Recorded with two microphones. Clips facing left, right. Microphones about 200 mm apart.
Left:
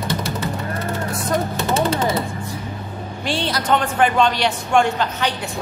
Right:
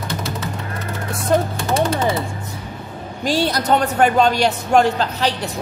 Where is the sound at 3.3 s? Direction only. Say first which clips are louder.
Right 3 dB; 40° right (ahead or behind).